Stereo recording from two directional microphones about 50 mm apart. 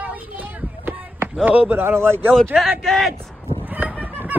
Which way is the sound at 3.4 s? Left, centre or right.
Right.